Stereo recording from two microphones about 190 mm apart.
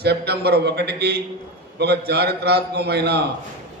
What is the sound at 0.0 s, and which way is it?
A man's voice, 60° right (ahead or behind).